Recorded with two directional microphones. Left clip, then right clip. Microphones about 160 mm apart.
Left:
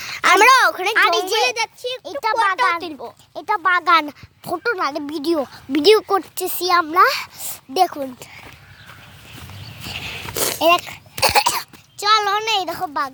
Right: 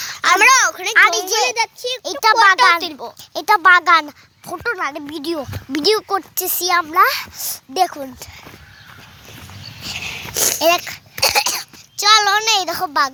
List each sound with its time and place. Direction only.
0.2 s a sound: 60° left (ahead or behind)
0.4 s a sound: 40° left (ahead or behind)
1.1 s a child's voice: 15° left (ahead or behind)
1.5 s a child's voice: 35° right (ahead or behind)
2.1 s a child's voice: 50° right (ahead or behind)
2.8 s a child's voice: 30° right (ahead or behind)
3.3 s speech: 70° right (ahead or behind)
3.9 s speech: 20° left (ahead or behind)
6.3 s a child's voice: 10° left (ahead or behind)
9.9 s dog: 35° left (ahead or behind)
10.6 s a child's voice: 5° right (ahead or behind)
11.1 s a sound: 35° left (ahead or behind)
11.9 s a child's voice: centre (ahead or behind)
12.8 s a child's voice: 45° right (ahead or behind)